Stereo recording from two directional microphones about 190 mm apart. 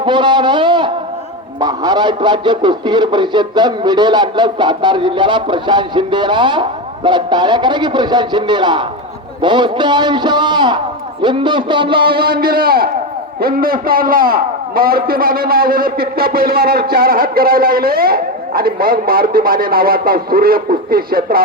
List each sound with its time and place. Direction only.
0.0 s a man's voice: 25° right (ahead or behind)
12.2 s a man's voice: 50° right (ahead or behind)